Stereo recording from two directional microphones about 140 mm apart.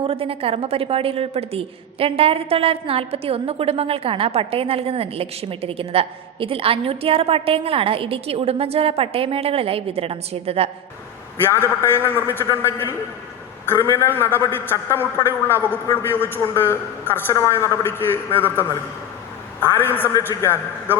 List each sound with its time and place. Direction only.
0.1 s a woman's voice: 45° right (ahead or behind)
11.4 s a man's voice: 15° left (ahead or behind)
19.6 s a man's voice: 15° left (ahead or behind)